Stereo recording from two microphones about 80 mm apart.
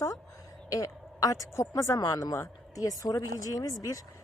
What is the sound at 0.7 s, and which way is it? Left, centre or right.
A woman's voice, left.